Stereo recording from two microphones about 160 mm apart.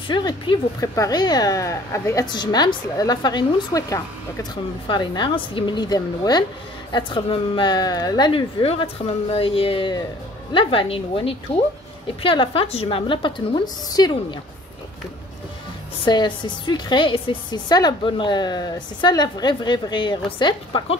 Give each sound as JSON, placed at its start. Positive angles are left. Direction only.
{"t": 0.1, "sound": "a woman's voice", "side_deg": 30}
{"t": 16.1, "sound": "speech", "side_deg": 30}